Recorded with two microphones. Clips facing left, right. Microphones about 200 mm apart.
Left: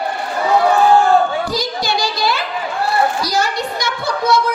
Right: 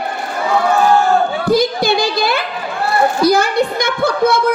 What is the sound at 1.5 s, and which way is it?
A child's voice, 55° right (ahead or behind).